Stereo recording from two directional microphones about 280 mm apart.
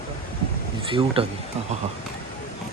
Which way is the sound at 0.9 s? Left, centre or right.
Centre.